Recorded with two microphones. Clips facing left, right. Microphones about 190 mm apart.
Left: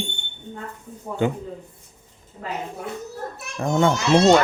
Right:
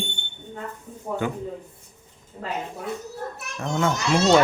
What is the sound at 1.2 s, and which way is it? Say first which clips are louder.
Speech: left 6 dB; 25° left (ahead or behind).